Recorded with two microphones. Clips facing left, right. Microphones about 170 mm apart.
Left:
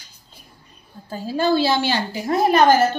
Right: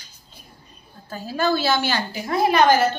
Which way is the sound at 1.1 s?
30° left (ahead or behind).